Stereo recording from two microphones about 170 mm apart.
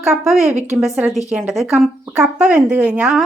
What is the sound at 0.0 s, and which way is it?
Speech, 5° right (ahead or behind).